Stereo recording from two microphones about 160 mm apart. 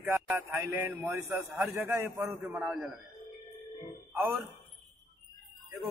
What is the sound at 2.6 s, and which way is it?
Speech, centre (ahead or behind).